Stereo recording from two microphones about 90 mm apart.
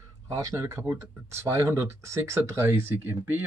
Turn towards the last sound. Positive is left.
turn(degrees=-25)  # may be behind; listen again after turning